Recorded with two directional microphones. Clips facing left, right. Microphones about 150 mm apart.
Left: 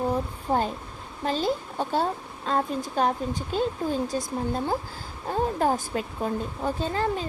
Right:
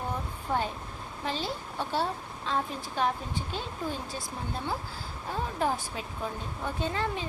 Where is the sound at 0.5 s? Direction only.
35° left (ahead or behind).